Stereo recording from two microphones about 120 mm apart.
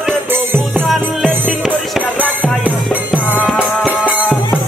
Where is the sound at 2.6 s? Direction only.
15° right (ahead or behind).